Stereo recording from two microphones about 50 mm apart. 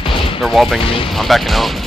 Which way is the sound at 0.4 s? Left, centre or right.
Centre.